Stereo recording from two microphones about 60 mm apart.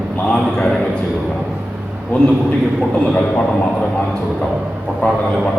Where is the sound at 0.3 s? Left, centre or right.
Centre.